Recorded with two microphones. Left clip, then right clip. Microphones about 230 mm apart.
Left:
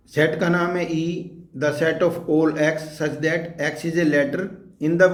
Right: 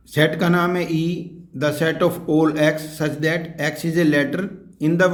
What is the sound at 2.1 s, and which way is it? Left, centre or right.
Speech, right.